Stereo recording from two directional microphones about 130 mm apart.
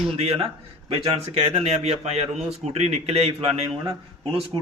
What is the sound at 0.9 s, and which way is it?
A man's voice, 50° right (ahead or behind).